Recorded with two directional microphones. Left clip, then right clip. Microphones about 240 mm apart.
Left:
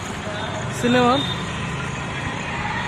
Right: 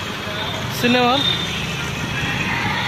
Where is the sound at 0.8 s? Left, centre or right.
Centre.